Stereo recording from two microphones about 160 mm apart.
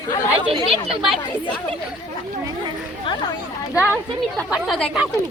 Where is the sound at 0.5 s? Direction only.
35° right (ahead or behind).